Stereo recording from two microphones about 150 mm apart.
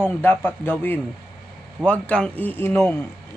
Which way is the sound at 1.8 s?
10° left (ahead or behind).